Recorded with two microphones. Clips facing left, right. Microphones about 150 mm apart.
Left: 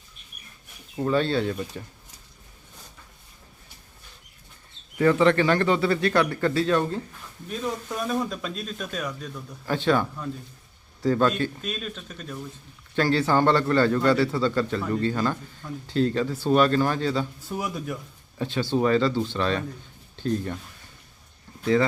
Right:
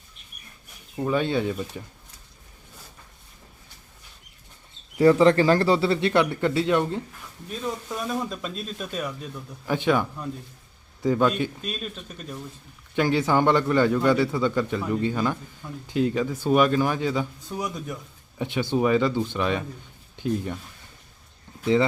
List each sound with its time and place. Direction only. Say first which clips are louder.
0.9 s a man's voice: left 1 dB; 10° right (ahead or behind)
5.2 s speech: right 2 dB; 35° right (ahead or behind); by 7.0 s 20° right (ahead or behind)
7.6 s a man's voice: left 1 dB; centre (ahead or behind)
13.0 s a man's voice: even; 15° right (ahead or behind)
17.5 s speech: left 2 dB; 5° left (ahead or behind)
18.3 s a man's voice: even; 20° right (ahead or behind)
21.6 s speech: right 1 dB; 20° right (ahead or behind)